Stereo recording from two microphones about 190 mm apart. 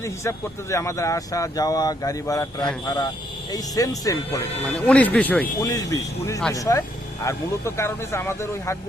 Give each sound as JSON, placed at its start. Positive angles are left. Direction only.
{"t": 0.0, "sound": "speech", "side_deg": 15}
{"t": 5.5, "sound": "speech", "side_deg": 20}